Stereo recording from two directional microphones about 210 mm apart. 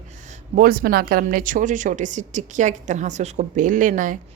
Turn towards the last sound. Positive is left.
turn(degrees=-40)  # may be behind; listen again after turning